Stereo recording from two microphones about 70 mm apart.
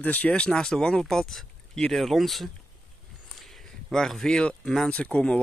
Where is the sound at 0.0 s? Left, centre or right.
Left; by 2.5 s centre.